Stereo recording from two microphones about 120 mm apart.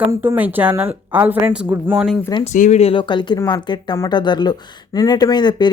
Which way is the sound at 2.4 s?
75° left (ahead or behind).